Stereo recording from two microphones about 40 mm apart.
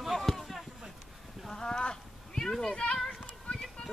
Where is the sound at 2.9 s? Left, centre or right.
Centre.